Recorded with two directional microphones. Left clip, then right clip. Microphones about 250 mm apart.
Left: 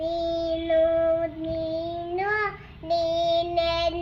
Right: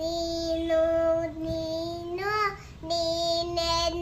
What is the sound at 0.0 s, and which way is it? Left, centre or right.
Child singing, centre.